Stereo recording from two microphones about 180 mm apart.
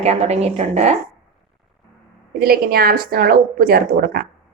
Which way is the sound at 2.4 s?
55° right (ahead or behind).